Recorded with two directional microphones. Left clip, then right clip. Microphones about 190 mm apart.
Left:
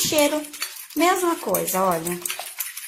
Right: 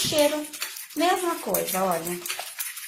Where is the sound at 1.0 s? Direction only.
40° left (ahead or behind).